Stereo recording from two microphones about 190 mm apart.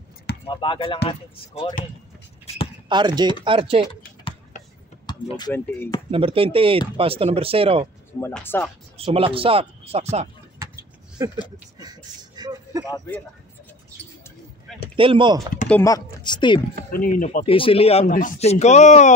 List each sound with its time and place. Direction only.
0.5 s speech: 25° left (ahead or behind)
2.9 s speech: 25° right (ahead or behind)
5.0 s a sound: 20° left (ahead or behind)
5.5 s speech: 10° left (ahead or behind)
6.0 s speech: 30° right (ahead or behind)
8.2 s speech: 10° left (ahead or behind)
8.9 s speech: 30° right (ahead or behind)
10.6 s a sound: 15° right (ahead or behind)
11.8 s speech: 20° right (ahead or behind)
12.8 s speech: 20° left (ahead or behind)
15.0 s speech: 25° right (ahead or behind)
15.7 s speech: 15° left (ahead or behind)
16.9 s speech: 45° left (ahead or behind)
17.4 s speech: 30° left (ahead or behind)